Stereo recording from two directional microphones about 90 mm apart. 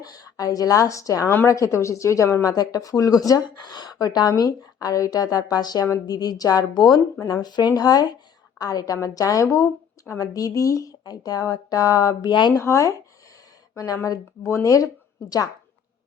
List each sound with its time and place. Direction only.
0.0 s a woman's voice: 40° left (ahead or behind)
3.4 s a woman's voice: 55° left (ahead or behind)
12.3 s speech: 60° left (ahead or behind)
12.5 s a woman's voice: 35° left (ahead or behind)